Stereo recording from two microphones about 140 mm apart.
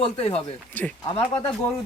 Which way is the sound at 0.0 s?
45° left (ahead or behind).